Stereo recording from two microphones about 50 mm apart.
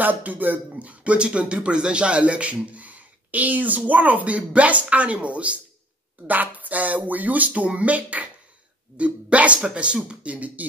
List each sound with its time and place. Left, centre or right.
0.0 s speech: right